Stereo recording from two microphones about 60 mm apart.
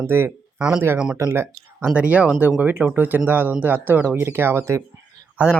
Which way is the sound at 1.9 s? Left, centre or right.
Right.